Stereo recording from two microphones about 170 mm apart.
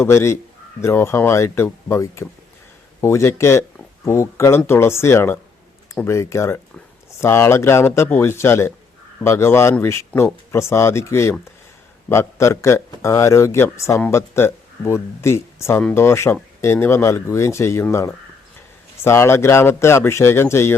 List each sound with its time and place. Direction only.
0.0 s a man's voice: 15° left (ahead or behind)